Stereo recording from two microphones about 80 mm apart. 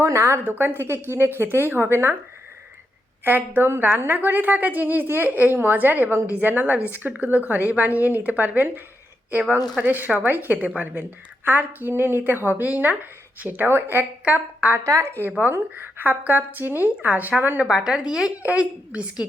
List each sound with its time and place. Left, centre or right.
0.0 s a woman's voice: right
0.4 s speech: right
3.2 s speech: right
14.8 s a woman's voice: right
15.4 s speech: right
17.7 s a woman's voice: centre